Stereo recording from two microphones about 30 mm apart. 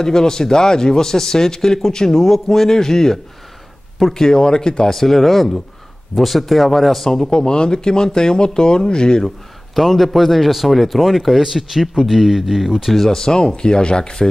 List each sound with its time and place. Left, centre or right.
0.0 s speech: centre
4.8 s speech: centre
7.2 s speech: left
9.8 s speech: centre
12.9 s speech: centre
13.2 s speech: left